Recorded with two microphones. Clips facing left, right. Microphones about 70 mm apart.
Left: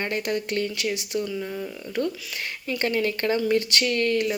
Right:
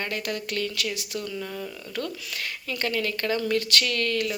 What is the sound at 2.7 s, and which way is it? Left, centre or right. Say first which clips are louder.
Speech: left 4 dB; left.